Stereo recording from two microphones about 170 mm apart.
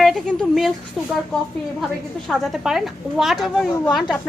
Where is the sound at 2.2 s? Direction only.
Centre (ahead or behind).